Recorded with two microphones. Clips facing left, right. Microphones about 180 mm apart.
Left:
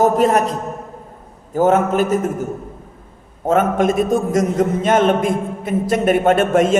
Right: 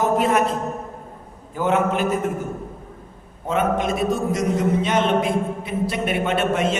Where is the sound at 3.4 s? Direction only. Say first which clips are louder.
Left 6 dB; 45° left (ahead or behind).